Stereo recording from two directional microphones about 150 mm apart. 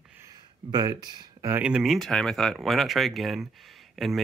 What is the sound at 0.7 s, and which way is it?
Speech, 25° right (ahead or behind).